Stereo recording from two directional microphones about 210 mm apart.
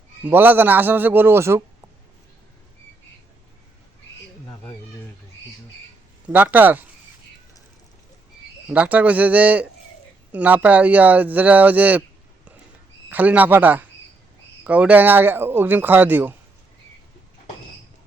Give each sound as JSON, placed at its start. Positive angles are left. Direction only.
{"t": 0.3, "sound": "speech", "side_deg": -10}
{"t": 6.2, "sound": "speech", "side_deg": -10}
{"t": 8.7, "sound": "speech", "side_deg": -5}
{"t": 13.1, "sound": "speech", "side_deg": -10}